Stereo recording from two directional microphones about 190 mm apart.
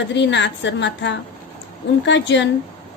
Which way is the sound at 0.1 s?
70° left (ahead or behind).